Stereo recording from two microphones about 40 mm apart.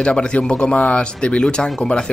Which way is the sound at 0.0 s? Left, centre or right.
Left.